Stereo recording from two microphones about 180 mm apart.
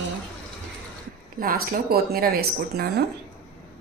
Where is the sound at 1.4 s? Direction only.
55° right (ahead or behind).